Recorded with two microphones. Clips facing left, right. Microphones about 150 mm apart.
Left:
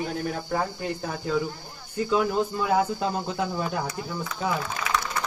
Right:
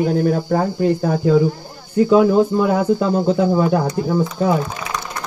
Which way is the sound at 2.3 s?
60° right (ahead or behind).